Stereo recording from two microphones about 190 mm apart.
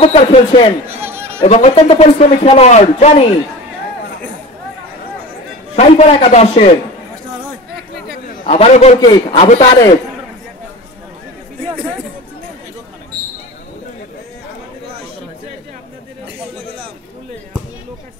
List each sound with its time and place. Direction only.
0.1 s speech: 35° left (ahead or behind)
0.8 s chatter: 10° right (ahead or behind)
1.4 s speech: 35° left (ahead or behind)
5.8 s speech: 35° left (ahead or behind)
8.5 s speech: 35° left (ahead or behind)